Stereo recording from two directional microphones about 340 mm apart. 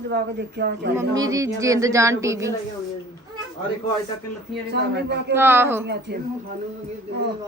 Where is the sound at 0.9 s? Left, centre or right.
Centre.